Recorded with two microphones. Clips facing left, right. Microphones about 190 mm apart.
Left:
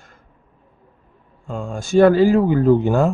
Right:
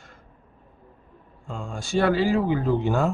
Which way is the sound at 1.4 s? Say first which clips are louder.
Left 7 dB; 45° left (ahead or behind).